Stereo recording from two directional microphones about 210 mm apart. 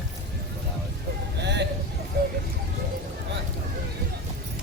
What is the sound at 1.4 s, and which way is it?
Vehicle, 55° right (ahead or behind).